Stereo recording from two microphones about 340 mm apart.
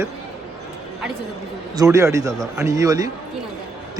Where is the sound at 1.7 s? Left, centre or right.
Centre.